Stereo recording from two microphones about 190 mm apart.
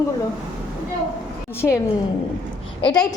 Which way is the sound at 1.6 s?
5° left (ahead or behind).